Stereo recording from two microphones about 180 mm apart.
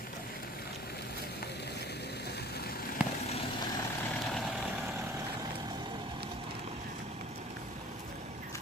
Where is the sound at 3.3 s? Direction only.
30° left (ahead or behind).